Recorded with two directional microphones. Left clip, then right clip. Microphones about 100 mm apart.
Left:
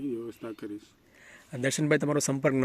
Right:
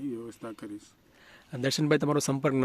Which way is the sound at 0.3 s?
45° right (ahead or behind).